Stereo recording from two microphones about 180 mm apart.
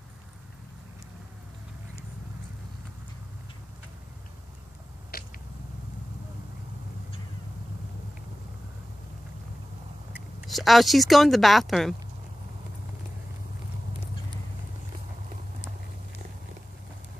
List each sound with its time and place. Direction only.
5.1 s biting: 60° left (ahead or behind)
10.4 s speech: centre (ahead or behind)